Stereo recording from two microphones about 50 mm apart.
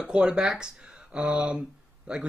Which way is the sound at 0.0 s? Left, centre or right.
Centre.